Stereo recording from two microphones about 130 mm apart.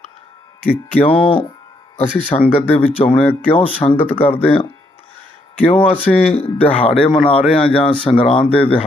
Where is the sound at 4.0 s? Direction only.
15° left (ahead or behind).